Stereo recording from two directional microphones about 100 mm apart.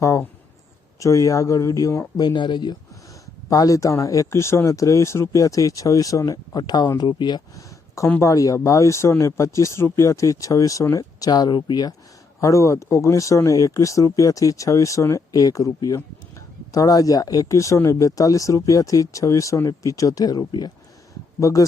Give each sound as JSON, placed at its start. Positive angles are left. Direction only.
{"t": 0.0, "sound": "speech", "side_deg": 30}
{"t": 2.2, "sound": "speech", "side_deg": 50}
{"t": 3.5, "sound": "speech", "side_deg": 35}
{"t": 7.5, "sound": "a sound", "side_deg": 35}
{"t": 8.2, "sound": "speech", "side_deg": 35}
{"t": 12.4, "sound": "speech", "side_deg": 30}